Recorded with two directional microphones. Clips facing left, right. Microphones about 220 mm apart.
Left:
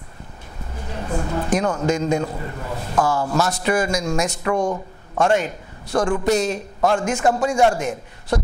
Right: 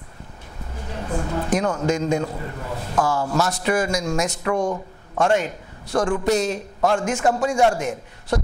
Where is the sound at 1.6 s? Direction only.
25° left (ahead or behind).